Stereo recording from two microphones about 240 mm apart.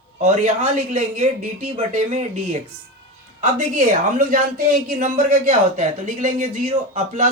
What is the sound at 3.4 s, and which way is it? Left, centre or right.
Speech, right.